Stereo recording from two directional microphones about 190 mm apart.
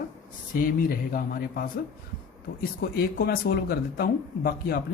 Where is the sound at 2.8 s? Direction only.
50° left (ahead or behind).